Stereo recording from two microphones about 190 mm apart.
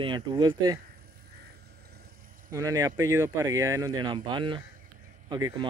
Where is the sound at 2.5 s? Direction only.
15° right (ahead or behind).